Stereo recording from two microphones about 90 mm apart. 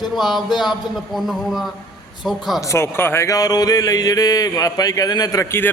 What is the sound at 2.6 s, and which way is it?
Speech, 30° left (ahead or behind).